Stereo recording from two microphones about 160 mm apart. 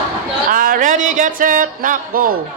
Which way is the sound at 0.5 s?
60° right (ahead or behind).